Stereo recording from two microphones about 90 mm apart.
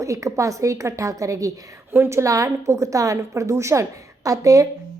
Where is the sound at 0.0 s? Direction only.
35° right (ahead or behind).